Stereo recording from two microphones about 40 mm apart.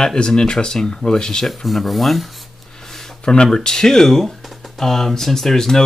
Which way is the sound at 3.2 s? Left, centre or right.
Left.